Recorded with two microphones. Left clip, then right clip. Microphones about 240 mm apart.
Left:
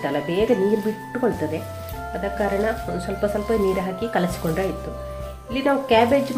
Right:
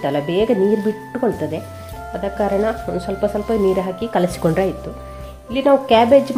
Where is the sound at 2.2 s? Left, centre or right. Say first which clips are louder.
Right 4 dB; right.